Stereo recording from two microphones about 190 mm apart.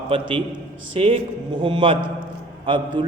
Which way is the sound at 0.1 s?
30° right (ahead or behind).